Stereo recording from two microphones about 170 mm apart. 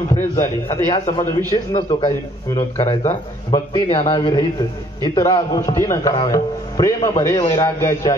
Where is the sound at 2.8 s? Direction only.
40° left (ahead or behind).